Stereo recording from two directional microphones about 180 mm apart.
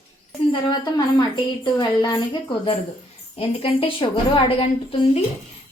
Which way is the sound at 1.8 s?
25° left (ahead or behind).